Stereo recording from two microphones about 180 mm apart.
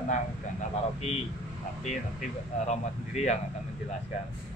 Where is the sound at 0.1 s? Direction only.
40° left (ahead or behind).